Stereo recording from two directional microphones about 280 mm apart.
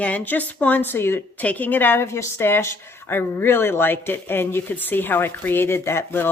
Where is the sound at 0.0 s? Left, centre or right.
Centre.